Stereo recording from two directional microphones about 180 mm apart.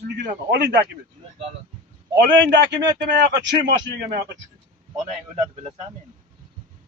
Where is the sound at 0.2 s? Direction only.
70° right (ahead or behind).